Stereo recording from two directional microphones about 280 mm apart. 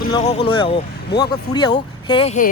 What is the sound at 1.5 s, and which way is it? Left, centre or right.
Speech, centre.